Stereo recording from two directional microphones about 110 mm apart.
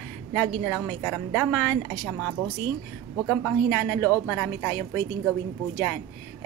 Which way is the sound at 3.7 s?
20° left (ahead or behind).